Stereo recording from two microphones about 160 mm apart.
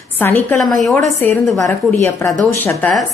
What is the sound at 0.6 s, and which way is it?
Speech, centre (ahead or behind).